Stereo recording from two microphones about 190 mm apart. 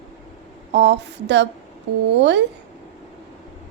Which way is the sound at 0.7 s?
65° right (ahead or behind).